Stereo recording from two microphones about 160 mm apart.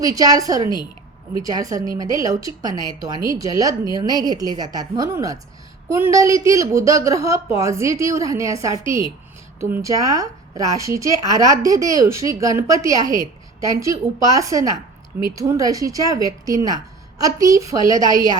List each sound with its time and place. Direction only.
0.0 s a woman's voice: 20° right (ahead or behind)
18.0 s a woman's voice: 25° left (ahead or behind)